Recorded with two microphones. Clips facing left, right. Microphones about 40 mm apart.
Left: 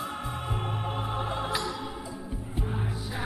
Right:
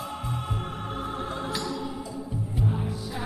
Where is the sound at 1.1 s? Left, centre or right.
Left.